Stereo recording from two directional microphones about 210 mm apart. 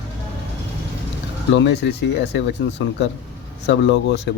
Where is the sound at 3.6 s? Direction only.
55° left (ahead or behind).